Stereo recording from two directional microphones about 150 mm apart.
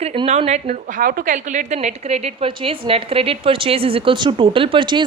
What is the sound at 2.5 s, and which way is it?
A woman's voice, 35° right (ahead or behind).